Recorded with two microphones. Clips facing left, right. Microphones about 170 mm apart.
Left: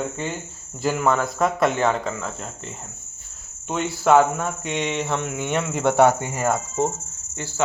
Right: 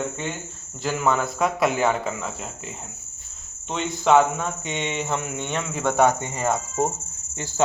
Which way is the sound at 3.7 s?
5° left (ahead or behind).